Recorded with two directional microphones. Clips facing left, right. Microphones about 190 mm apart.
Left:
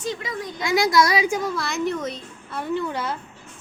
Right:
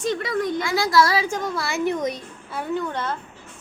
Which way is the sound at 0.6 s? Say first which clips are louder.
Left 3 dB; 15° left (ahead or behind).